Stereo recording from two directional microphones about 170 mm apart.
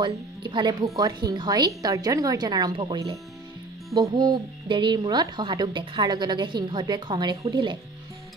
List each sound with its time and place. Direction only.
0.0 s a woman's voice: 25° right (ahead or behind)